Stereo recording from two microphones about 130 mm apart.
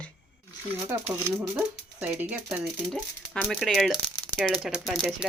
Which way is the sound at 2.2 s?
15° right (ahead or behind).